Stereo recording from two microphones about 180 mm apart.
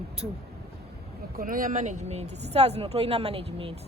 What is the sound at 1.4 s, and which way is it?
Speech, 50° right (ahead or behind).